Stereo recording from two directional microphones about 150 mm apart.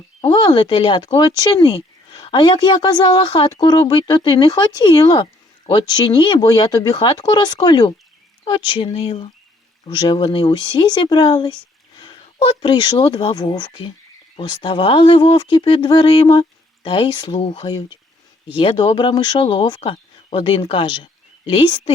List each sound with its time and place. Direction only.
0.3 s a woman's voice: 30° left (ahead or behind)
13.3 s speech: 30° left (ahead or behind)